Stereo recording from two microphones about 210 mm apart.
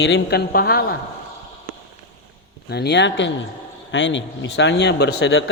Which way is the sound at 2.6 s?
50° left (ahead or behind).